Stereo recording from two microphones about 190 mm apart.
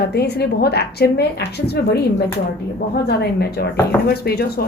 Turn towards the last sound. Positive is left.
turn(degrees=55)  # may be behind; listen again after turning